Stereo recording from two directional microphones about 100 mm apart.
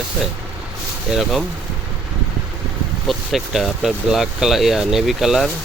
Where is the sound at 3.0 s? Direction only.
Centre (ahead or behind).